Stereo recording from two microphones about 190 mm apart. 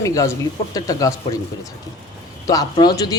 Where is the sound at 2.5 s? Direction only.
20° left (ahead or behind).